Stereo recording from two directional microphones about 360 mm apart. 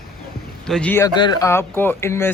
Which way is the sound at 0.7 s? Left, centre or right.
Centre.